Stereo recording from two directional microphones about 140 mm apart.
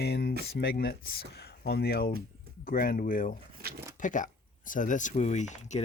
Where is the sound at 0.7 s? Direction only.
90° left.